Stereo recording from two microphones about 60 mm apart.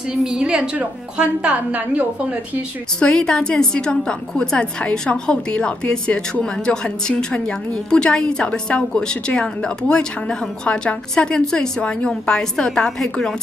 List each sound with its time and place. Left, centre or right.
0.1 s a woman's voice: centre
3.0 s a woman's voice: centre